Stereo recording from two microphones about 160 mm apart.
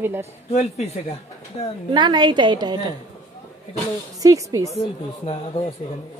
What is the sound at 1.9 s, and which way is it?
A woman's voice, 30° right (ahead or behind).